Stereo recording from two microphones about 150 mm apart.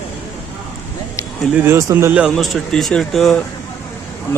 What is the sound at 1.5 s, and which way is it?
Speech, 15° right (ahead or behind).